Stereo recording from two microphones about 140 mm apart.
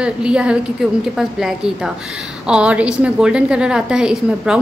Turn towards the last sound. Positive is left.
turn(degrees=-5)  # may be behind; listen again after turning